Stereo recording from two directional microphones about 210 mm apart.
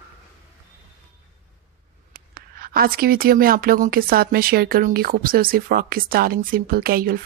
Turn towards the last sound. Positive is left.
turn(degrees=-45)  # may be behind; listen again after turning